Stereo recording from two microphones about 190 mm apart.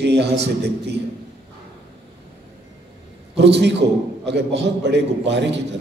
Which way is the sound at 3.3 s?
65° right (ahead or behind).